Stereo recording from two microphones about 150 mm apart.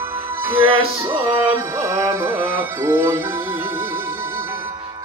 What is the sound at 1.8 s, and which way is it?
Music, 20° right (ahead or behind).